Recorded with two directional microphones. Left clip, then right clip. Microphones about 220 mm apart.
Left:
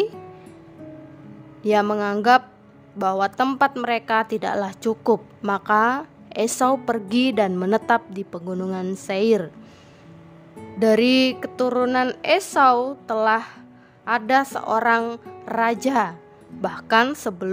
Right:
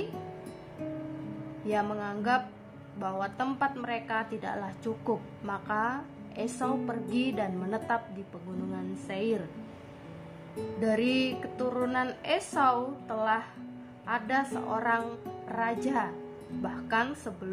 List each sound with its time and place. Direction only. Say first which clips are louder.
1.6 s a woman's voice: left 12 dB; 45° left (ahead or behind)
10.8 s a woman's voice: left 12 dB; 50° left (ahead or behind)